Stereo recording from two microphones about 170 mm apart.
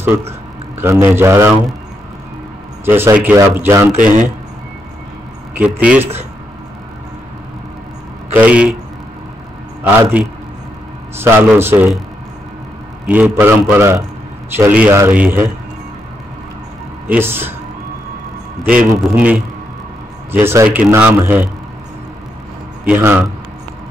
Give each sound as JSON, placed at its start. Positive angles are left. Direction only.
{"t": 0.7, "sound": "speech", "side_deg": -15}
{"t": 2.8, "sound": "speech", "side_deg": -15}
{"t": 5.6, "sound": "speech", "side_deg": -10}
{"t": 8.3, "sound": "speech", "side_deg": -10}
{"t": 11.1, "sound": "speech", "side_deg": -15}
{"t": 13.0, "sound": "speech", "side_deg": -10}
{"t": 17.1, "sound": "speech", "side_deg": -15}
{"t": 18.6, "sound": "speech", "side_deg": -5}
{"t": 22.8, "sound": "speech", "side_deg": -10}